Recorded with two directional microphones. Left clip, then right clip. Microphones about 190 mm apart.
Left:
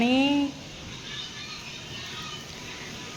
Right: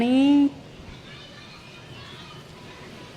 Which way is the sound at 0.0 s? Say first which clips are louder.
Right 3 dB; 20° right (ahead or behind).